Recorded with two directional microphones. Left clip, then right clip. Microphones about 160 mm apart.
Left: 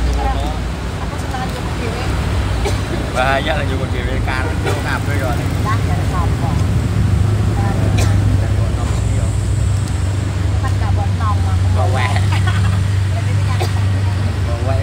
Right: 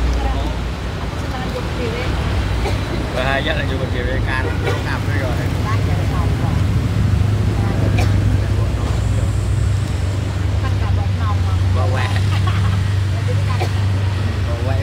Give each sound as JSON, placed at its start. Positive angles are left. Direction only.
{"t": 3.2, "sound": "speech", "side_deg": -20}